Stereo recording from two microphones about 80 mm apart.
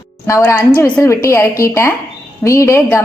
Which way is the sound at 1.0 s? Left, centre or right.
Left.